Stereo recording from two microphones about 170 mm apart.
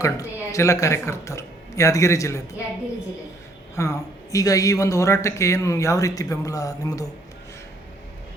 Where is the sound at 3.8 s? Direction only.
20° left (ahead or behind).